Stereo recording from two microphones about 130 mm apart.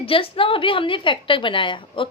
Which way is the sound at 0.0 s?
45° left (ahead or behind).